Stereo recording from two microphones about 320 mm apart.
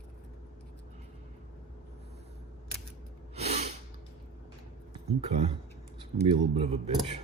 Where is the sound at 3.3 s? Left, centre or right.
Centre.